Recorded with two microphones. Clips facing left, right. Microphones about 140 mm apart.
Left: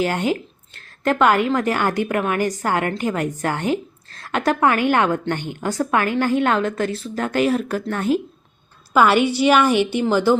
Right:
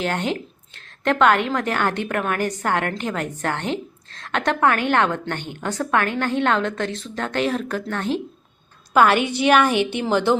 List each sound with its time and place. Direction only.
0.0 s a woman's voice: 10° left (ahead or behind)
9.2 s a woman's voice: 55° right (ahead or behind)
9.5 s a woman's voice: 5° left (ahead or behind)